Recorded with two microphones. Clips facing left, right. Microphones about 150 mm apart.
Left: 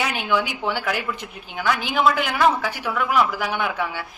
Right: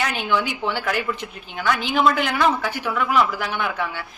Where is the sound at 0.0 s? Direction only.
10° left (ahead or behind).